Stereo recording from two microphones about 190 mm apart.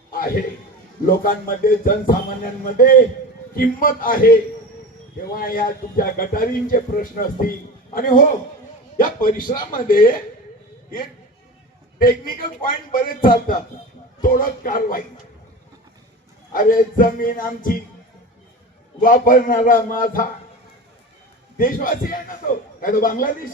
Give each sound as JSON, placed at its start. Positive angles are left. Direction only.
{"t": 0.1, "sound": "a sound", "side_deg": 50}
{"t": 1.0, "sound": "speech", "side_deg": 45}
{"t": 5.3, "sound": "speech", "side_deg": 50}
{"t": 11.9, "sound": "speech", "side_deg": 50}
{"t": 16.5, "sound": "speech", "side_deg": 45}
{"t": 18.9, "sound": "speech", "side_deg": 45}
{"t": 21.6, "sound": "speech", "side_deg": 45}